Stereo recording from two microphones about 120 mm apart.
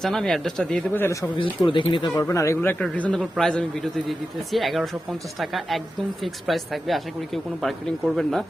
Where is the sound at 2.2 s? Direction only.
25° left (ahead or behind).